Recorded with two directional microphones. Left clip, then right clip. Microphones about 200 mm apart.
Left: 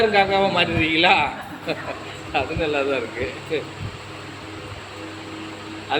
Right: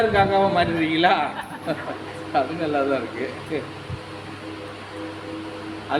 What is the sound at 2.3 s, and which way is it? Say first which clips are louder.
Speech: even; 15° right (ahead or behind).